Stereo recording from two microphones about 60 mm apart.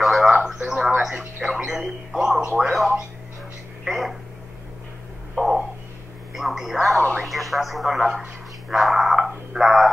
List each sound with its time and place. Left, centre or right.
0.0 s a sound: centre
0.6 s radio: centre
0.8 s radio: centre
1.5 s speech: centre
3.8 s speech: centre
5.3 s a sound: centre
6.3 s speech: centre